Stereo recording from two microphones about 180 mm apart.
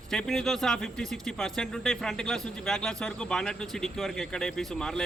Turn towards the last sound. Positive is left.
turn(degrees=5)  # may be behind; listen again after turning